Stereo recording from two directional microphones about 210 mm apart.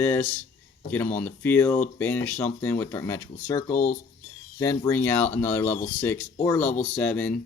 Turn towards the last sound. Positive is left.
turn(degrees=5)  # may be behind; listen again after turning